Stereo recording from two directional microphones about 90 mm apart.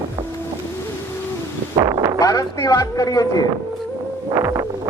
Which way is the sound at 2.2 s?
45° left (ahead or behind).